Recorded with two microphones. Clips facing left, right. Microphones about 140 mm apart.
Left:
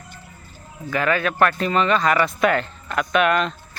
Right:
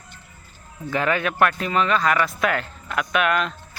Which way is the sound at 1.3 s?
10° right (ahead or behind).